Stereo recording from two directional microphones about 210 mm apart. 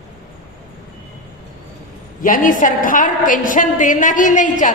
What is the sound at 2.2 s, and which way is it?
A woman's voice, 40° left (ahead or behind).